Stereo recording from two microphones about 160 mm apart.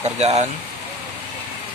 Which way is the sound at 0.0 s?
40° right (ahead or behind).